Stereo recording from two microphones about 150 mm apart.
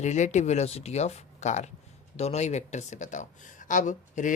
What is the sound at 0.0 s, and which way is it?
Speech, 50° left (ahead or behind).